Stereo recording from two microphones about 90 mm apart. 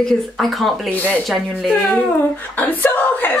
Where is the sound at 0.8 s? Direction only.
15° left (ahead or behind).